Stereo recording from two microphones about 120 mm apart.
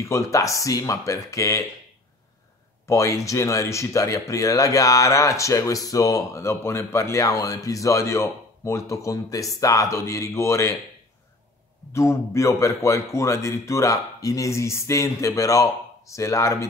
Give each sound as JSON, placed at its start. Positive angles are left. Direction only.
{"t": 0.0, "sound": "speech", "side_deg": 25}
{"t": 2.9, "sound": "speech", "side_deg": 25}
{"t": 11.9, "sound": "speech", "side_deg": 25}